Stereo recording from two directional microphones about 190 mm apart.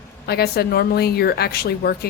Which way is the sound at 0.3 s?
55° left (ahead or behind).